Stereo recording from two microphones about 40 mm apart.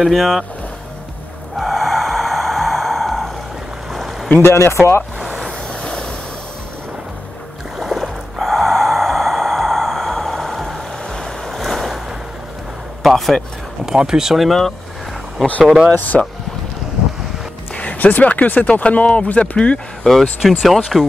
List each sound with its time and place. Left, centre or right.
0.0 s speech: centre
1.6 s sigh: centre
3.9 s a sound: centre
4.4 s speech: left
5.7 s vehicle: centre
7.8 s gasp: centre
11.1 s waves: centre
13.0 s speech: centre
13.8 s speech: centre
14.3 s speech: centre
16.1 s speech: centre
17.7 s speech: left
20.0 s speech: centre